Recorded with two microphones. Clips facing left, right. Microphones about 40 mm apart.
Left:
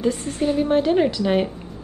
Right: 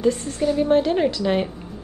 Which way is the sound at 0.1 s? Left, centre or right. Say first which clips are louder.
Even; left.